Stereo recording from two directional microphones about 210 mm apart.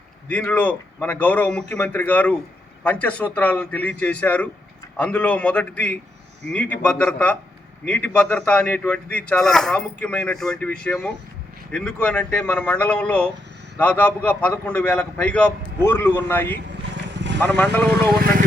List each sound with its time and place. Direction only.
0.3 s a man's voice: 5° left (ahead or behind)
17.2 s vehicle: 55° right (ahead or behind)
17.4 s a man's voice: 10° left (ahead or behind)
17.8 s speech: 50° right (ahead or behind)